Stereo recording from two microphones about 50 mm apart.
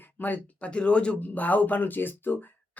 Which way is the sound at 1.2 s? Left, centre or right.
Left.